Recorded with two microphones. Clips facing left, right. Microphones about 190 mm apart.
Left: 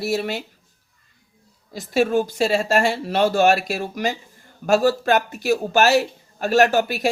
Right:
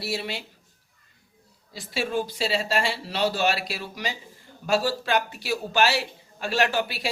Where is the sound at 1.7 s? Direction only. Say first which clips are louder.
Left 8 dB; 45° left (ahead or behind).